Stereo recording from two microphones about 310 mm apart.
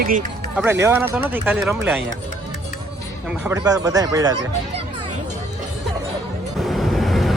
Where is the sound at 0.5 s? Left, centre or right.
Centre.